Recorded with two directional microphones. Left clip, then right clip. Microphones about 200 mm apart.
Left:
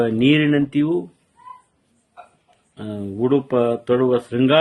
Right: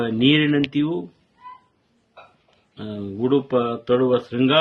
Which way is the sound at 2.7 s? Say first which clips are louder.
Left 2 dB; 40° left (ahead or behind).